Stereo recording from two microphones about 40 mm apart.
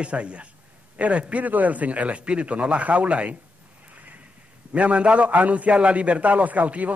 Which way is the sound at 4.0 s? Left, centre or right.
Right.